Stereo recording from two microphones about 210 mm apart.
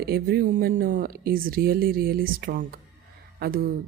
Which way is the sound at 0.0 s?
45° right (ahead or behind).